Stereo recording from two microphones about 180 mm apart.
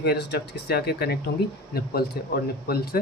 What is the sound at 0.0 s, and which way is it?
A man's voice, 65° left (ahead or behind).